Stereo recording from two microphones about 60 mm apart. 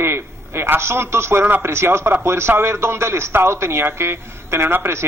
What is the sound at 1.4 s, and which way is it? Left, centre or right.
Speech, right.